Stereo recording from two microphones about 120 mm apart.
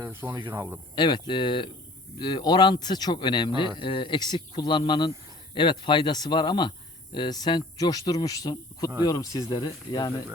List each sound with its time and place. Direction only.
0.1 s speech: 20° right (ahead or behind)
0.9 s speech: 40° left (ahead or behind)